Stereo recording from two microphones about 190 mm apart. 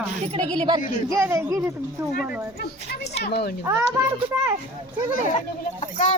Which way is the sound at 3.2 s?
60° left (ahead or behind).